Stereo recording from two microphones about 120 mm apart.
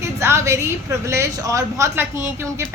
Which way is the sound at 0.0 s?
20° right (ahead or behind).